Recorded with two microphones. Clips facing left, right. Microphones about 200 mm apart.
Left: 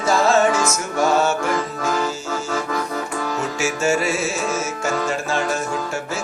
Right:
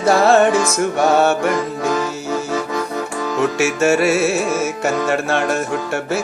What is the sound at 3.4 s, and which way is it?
Music, 65° right (ahead or behind).